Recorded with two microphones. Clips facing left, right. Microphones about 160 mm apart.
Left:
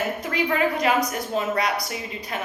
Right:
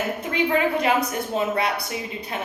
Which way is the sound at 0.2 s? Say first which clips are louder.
Right 3 dB; 25° right (ahead or behind).